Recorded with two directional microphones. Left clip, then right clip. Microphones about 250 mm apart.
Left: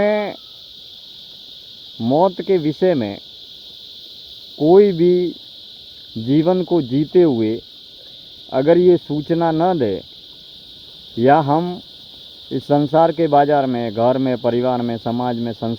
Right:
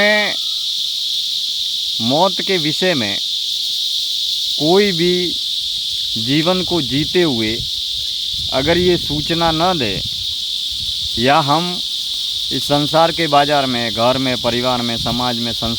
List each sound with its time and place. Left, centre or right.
0.0 s owl: centre
2.0 s speech: right
4.6 s speech: centre
8.5 s speech: centre
11.2 s speech: centre
12.7 s speech: right